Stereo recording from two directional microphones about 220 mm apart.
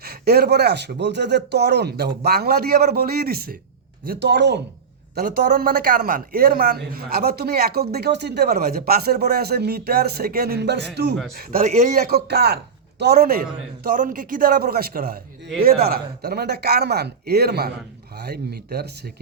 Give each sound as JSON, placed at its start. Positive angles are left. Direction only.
{"t": 0.0, "sound": "speech", "side_deg": -45}
{"t": 5.1, "sound": "a man's voice", "side_deg": -40}